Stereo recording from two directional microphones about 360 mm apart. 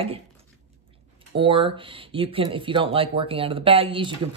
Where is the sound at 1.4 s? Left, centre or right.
Centre.